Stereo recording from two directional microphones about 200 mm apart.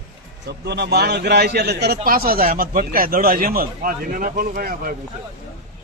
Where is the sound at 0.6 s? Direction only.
55° right (ahead or behind).